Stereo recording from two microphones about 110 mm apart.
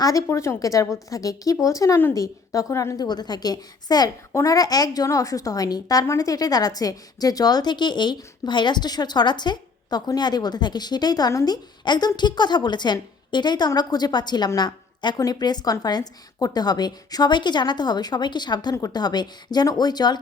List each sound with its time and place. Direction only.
0.0 s a woman's voice: 30° left (ahead or behind)